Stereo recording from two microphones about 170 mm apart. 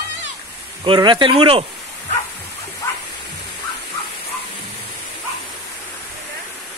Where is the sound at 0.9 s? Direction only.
25° right (ahead or behind).